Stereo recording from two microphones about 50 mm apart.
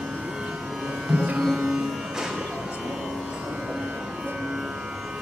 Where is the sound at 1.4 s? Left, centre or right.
Centre.